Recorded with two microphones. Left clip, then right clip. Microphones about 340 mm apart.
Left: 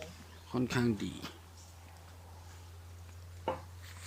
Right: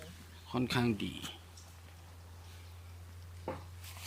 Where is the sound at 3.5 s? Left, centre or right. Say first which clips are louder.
Left 5 dB; left.